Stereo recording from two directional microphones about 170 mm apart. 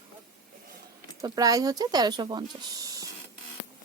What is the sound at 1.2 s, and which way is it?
A woman's voice, 20° right (ahead or behind).